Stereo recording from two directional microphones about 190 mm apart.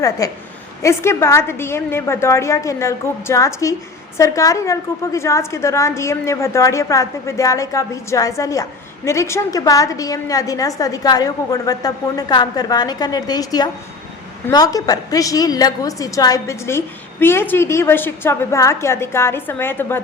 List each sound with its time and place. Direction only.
0.2 s a woman's voice: 20° left (ahead or behind)